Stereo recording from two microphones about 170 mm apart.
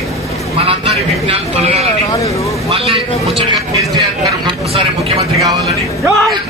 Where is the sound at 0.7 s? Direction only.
35° right (ahead or behind).